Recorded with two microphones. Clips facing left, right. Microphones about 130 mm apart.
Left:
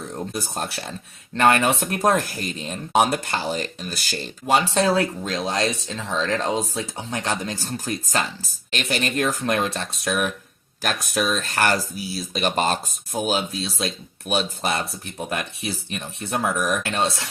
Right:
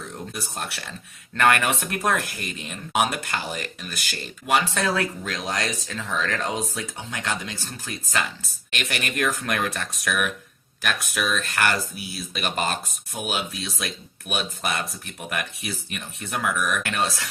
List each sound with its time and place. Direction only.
0.3 s speech: 35° left (ahead or behind)